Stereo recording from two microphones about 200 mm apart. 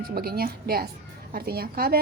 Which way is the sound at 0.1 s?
50° right (ahead or behind).